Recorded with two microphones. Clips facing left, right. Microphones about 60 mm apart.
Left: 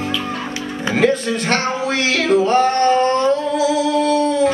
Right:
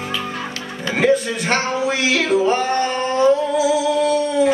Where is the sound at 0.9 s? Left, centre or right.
Centre.